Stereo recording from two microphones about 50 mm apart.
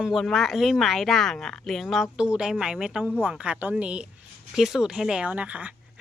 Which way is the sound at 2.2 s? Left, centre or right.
Centre.